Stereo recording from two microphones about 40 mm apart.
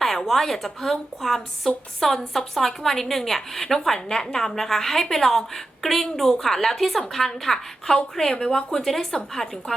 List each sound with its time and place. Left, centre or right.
0.0 s a woman's voice: centre